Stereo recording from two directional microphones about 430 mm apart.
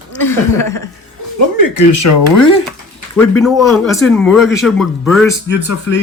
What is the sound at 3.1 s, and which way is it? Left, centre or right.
A man's voice, centre.